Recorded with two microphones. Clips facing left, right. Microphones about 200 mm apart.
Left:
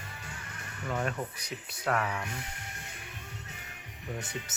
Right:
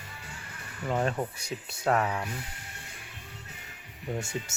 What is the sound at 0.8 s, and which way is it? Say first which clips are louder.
Speech: right 4 dB; 30° right (ahead or behind).